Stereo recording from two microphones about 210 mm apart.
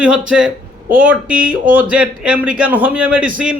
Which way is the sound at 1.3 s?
40° right (ahead or behind).